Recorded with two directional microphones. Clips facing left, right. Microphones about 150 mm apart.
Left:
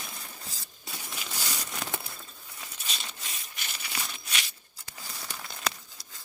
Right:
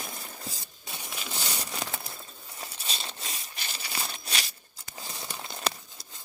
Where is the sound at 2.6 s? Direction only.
30° right (ahead or behind).